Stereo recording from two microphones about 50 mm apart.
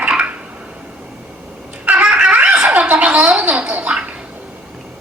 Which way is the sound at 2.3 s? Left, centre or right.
Right.